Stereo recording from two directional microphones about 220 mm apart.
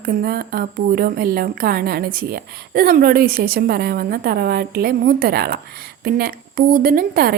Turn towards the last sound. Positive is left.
turn(degrees=-45)  # may be behind; listen again after turning